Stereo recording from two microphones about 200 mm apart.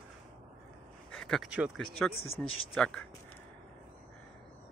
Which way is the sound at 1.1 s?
Centre (ahead or behind).